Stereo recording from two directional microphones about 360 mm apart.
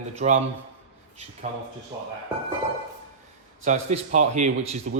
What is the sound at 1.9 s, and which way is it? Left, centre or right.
Speech, centre.